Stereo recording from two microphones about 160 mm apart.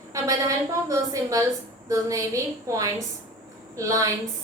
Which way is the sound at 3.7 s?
20° right (ahead or behind).